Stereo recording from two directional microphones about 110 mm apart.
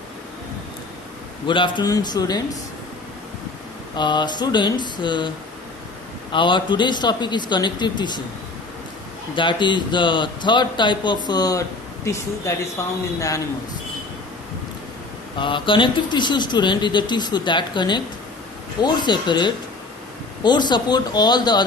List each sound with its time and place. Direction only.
1.5 s speech: 45° left (ahead or behind)
3.9 s speech: 45° left (ahead or behind)
6.3 s speech: 45° left (ahead or behind)
9.3 s speech: 45° left (ahead or behind)
12.0 s speech: 25° left (ahead or behind)
15.4 s speech: 50° left (ahead or behind)